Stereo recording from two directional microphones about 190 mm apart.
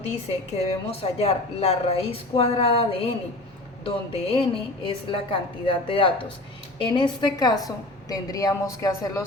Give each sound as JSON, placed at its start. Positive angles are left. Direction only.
{"t": 0.5, "sound": "a woman's voice", "side_deg": 35}